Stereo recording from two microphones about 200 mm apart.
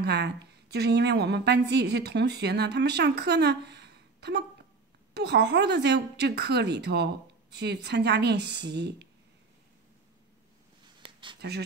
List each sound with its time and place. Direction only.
0.0 s a woman's voice: 55° right (ahead or behind)
11.4 s a woman's voice: 55° right (ahead or behind)